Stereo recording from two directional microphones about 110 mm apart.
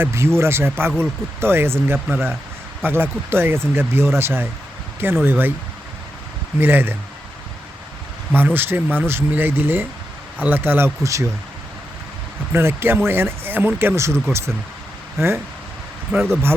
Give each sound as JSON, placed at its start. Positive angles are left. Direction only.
{"t": 0.0, "sound": "speech", "side_deg": -25}
{"t": 6.6, "sound": "speech", "side_deg": -20}
{"t": 8.4, "sound": "speech", "side_deg": -20}
{"t": 12.5, "sound": "speech", "side_deg": -20}
{"t": 16.1, "sound": "speech", "side_deg": -20}